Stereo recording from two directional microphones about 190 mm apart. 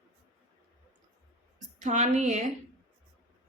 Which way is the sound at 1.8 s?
40° right (ahead or behind).